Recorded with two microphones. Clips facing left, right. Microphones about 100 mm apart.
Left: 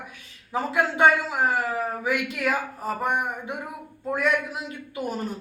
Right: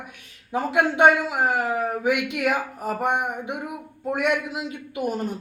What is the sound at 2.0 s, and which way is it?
Speech, 65° right (ahead or behind).